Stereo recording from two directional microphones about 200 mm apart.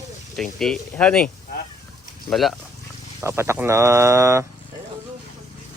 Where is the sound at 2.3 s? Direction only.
Centre (ahead or behind).